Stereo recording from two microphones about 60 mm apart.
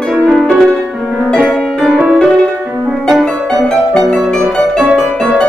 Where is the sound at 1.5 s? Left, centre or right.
Centre.